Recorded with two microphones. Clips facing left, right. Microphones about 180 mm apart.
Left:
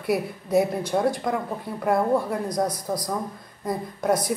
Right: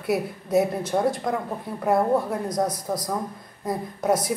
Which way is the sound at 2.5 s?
25° right (ahead or behind).